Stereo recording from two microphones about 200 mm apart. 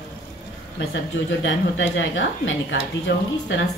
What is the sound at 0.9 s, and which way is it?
A woman's voice, 70° left (ahead or behind).